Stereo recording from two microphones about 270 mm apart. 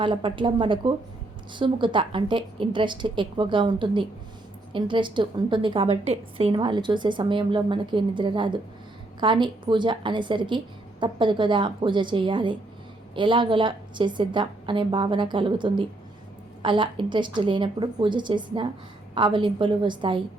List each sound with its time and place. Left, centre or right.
0.0 s a woman's voice: centre